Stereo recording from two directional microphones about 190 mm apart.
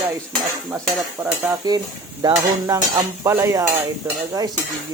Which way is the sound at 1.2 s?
15° right (ahead or behind).